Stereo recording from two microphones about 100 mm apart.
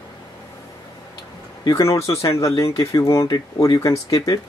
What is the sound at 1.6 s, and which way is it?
Speech, 35° left (ahead or behind).